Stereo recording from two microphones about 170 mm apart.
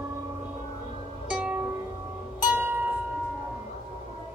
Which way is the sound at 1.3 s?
5° right (ahead or behind).